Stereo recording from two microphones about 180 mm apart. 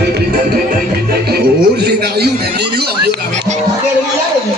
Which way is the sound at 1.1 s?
60° right (ahead or behind).